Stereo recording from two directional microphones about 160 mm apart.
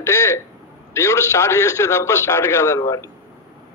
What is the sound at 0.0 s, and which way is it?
A man's voice, 20° left (ahead or behind).